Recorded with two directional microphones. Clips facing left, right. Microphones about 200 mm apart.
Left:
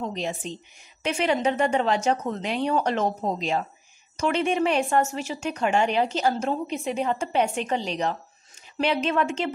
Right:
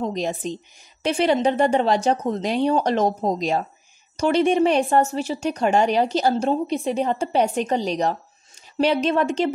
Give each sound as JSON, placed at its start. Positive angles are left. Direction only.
{"t": 0.0, "sound": "a woman's voice", "side_deg": -40}